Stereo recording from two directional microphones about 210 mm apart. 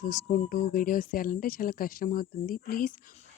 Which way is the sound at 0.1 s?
40° left (ahead or behind).